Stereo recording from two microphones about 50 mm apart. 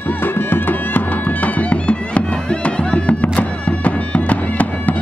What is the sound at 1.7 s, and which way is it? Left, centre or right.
Music, left.